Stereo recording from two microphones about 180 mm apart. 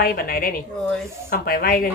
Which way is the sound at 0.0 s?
55° left (ahead or behind).